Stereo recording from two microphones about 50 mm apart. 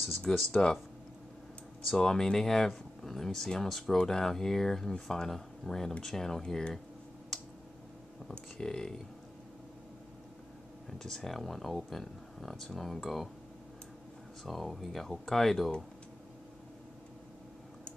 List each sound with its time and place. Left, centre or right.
0.5 s speech: centre
1.9 s speech: centre
7.3 s a sound: centre
8.3 s speech: centre
10.9 s speech: centre
14.4 s speech: centre